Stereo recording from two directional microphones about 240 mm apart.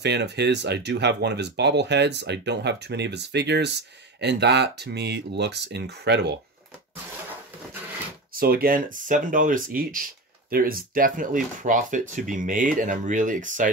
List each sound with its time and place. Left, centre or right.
0.0 s speech: right
8.3 s speech: right